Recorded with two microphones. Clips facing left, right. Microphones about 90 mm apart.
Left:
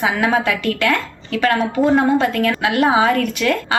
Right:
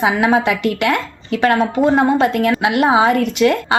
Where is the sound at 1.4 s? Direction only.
30° right (ahead or behind).